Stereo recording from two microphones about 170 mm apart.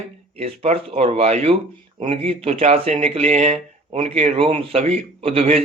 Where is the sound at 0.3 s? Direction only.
35° right (ahead or behind).